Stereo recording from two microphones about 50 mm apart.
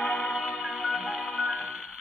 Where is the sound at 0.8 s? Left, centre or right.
Right.